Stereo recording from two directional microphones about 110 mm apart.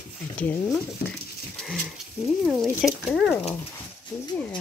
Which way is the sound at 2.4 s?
Centre (ahead or behind).